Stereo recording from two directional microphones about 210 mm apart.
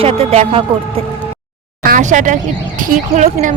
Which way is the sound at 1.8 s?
40° right (ahead or behind).